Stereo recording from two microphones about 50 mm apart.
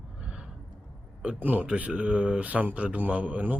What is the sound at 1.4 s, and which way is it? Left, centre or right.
Speech, right.